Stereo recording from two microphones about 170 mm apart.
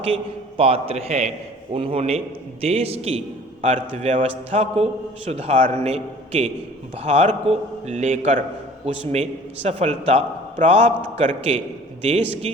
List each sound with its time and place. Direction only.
0.0 s a man's voice: 35° right (ahead or behind)